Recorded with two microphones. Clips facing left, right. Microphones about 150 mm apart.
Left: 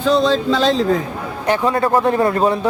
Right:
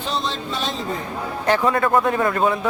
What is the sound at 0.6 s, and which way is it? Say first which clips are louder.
Speech: left 11 dB; 90° left.